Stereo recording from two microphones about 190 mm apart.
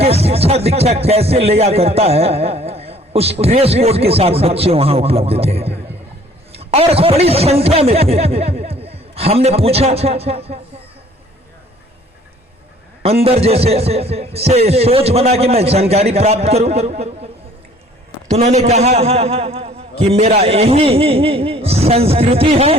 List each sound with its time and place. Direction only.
0.0 s a man's voice: 30° right (ahead or behind)
13.0 s speech: 30° right (ahead or behind)
18.3 s speech: 35° right (ahead or behind)